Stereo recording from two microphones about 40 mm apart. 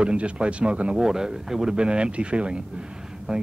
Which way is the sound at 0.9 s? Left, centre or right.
Centre.